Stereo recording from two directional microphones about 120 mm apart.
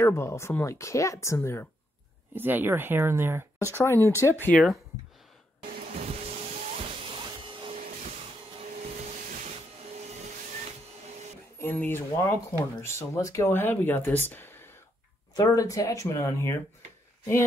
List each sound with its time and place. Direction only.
0.0 s speech: 25° left (ahead or behind)
2.3 s speech: 15° right (ahead or behind)
3.5 s speech: 25° left (ahead or behind)
5.9 s music: 70° right (ahead or behind)
6.8 s vacuum cleaner: 50° right (ahead or behind)
8.6 s vacuum cleaner: 90° right
11.5 s speech: 15° left (ahead or behind)
14.3 s a sound: 20° left (ahead or behind)
15.3 s speech: 30° left (ahead or behind)